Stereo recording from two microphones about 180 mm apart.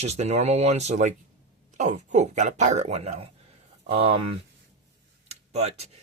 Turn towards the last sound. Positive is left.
turn(degrees=-35)  # may be behind; listen again after turning